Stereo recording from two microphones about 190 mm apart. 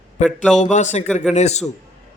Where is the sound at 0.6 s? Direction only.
35° left (ahead or behind).